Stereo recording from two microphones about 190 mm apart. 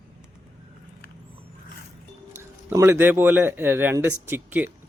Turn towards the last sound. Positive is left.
turn(degrees=-10)  # may be behind; listen again after turning